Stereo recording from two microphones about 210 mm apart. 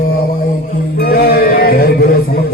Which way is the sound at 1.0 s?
45° left (ahead or behind).